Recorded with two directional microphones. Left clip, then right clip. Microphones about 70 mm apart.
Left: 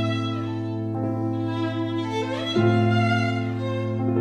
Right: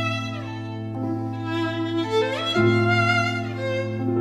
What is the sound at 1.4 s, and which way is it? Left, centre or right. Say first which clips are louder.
Music: right 1 dB; left.